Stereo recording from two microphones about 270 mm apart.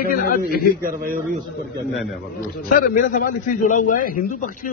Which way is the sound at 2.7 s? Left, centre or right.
Left.